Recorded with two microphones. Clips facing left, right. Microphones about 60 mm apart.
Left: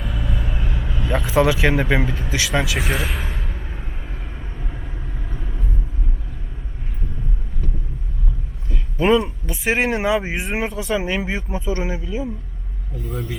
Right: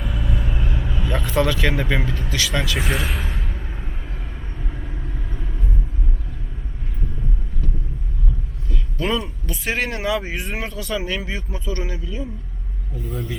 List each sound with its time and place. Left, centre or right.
0.0 s vehicle: centre
2.3 s speech: centre
4.6 s vehicle: centre
8.7 s a sound: left
9.5 s speech: centre
13.1 s speech: centre